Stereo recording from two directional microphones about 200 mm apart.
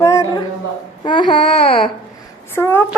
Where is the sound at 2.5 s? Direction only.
10° left (ahead or behind).